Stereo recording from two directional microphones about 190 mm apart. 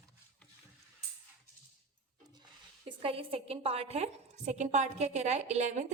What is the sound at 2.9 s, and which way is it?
A woman's voice, 30° right (ahead or behind).